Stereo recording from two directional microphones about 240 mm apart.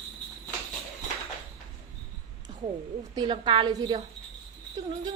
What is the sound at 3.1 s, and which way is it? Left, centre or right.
Speech, centre.